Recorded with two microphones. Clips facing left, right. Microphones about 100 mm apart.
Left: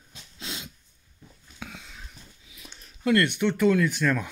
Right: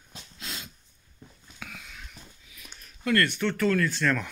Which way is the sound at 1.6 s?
25° left (ahead or behind).